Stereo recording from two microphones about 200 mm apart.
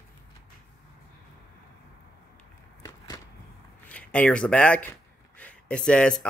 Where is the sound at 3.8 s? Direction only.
5° left (ahead or behind).